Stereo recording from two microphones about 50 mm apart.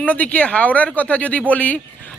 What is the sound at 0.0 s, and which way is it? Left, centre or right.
A man's voice, left.